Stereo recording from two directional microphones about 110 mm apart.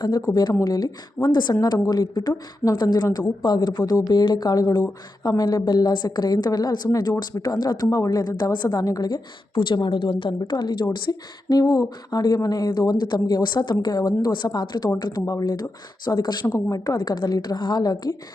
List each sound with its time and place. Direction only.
0.0 s a woman's voice: 35° left (ahead or behind)